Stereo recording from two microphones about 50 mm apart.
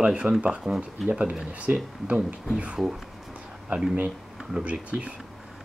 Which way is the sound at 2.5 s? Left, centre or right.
Right.